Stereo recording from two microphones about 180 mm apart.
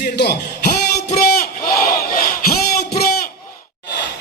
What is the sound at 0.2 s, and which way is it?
Speech, 60° left (ahead or behind).